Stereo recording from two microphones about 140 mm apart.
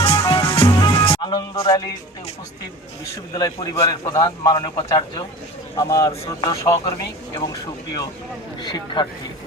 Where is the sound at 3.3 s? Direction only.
25° left (ahead or behind).